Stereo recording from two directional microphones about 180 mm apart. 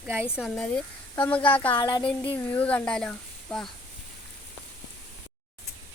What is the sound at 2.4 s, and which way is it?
Speech, 10° left (ahead or behind).